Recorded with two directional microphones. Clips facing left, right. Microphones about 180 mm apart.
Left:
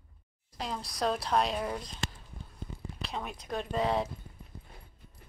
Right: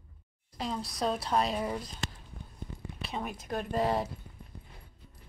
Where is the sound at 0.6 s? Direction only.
Centre (ahead or behind).